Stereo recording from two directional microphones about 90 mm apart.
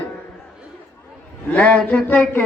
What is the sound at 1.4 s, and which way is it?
Speech, 15° left (ahead or behind).